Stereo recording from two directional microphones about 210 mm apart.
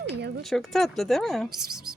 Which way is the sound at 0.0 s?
55° right (ahead or behind).